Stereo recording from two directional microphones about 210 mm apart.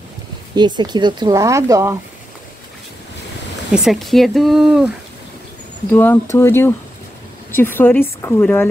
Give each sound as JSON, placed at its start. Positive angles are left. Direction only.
{"t": 0.6, "sound": "speech", "side_deg": -20}
{"t": 3.7, "sound": "speech", "side_deg": 0}
{"t": 5.9, "sound": "a woman's voice", "side_deg": 10}